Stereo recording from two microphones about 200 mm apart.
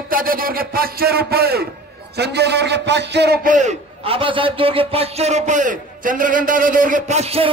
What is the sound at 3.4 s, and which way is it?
Speech, 40° right (ahead or behind).